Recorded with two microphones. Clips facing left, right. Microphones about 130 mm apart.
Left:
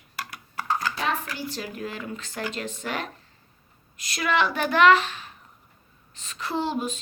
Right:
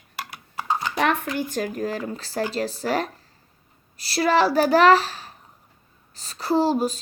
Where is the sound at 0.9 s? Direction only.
65° right (ahead or behind).